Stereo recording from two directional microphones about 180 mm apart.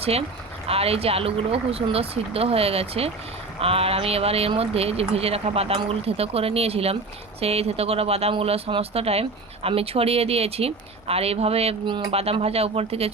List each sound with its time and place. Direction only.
0.0 s speech: 35° right (ahead or behind)